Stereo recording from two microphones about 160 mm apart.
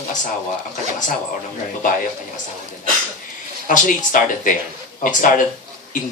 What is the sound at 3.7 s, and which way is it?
Speech, 55° left (ahead or behind).